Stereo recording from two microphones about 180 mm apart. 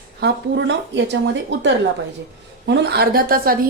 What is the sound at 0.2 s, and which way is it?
Speech, 70° right (ahead or behind).